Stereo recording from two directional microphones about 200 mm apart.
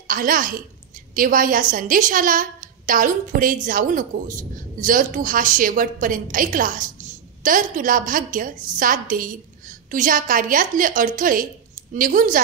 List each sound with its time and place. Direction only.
0.1 s a woman's voice: 45° right (ahead or behind)